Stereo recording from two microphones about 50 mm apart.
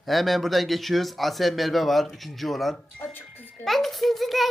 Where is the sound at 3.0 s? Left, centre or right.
Left.